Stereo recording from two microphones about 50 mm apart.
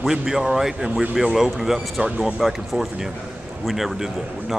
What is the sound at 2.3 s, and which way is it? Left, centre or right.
A man's voice, centre.